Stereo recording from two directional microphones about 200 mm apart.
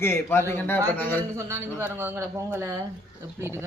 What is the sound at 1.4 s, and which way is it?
Speech, 15° right (ahead or behind).